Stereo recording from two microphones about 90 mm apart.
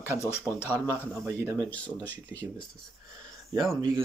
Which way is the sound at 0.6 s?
35° right (ahead or behind).